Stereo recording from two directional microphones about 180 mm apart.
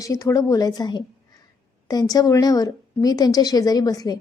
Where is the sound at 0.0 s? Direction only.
20° left (ahead or behind).